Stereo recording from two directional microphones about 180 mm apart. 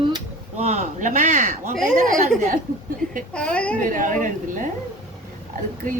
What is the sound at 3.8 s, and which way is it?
Speech, 45° right (ahead or behind).